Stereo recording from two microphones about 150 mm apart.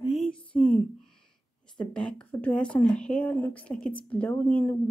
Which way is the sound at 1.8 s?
5° left (ahead or behind).